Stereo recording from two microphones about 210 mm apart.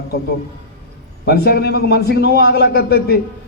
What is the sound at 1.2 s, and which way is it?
A man's voice, 50° left (ahead or behind).